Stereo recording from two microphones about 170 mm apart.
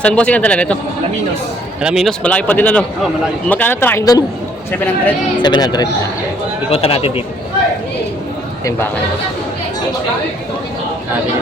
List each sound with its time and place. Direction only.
0.0 s speech: 5° left (ahead or behind)
1.8 s speech: 5° right (ahead or behind); by 4.2 s 15° left (ahead or behind)
5.4 s speech: 25° left (ahead or behind)
6.7 s speech: 35° left (ahead or behind)